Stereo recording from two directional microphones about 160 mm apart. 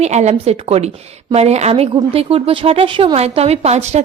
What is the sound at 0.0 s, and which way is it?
Speech, 45° right (ahead or behind).